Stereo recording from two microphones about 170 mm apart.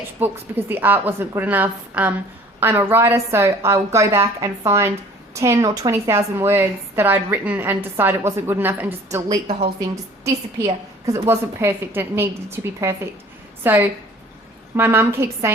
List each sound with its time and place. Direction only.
0.2 s a woman's voice: 10° right (ahead or behind)